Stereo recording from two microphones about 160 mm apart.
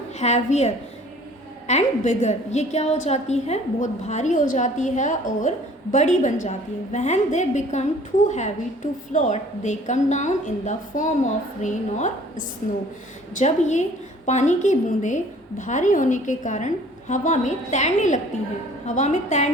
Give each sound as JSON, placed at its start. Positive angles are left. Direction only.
{"t": 0.2, "sound": "a woman's voice", "side_deg": 45}
{"t": 13.3, "sound": "a woman's voice", "side_deg": 45}